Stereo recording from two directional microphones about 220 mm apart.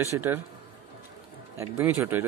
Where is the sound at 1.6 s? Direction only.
15° right (ahead or behind).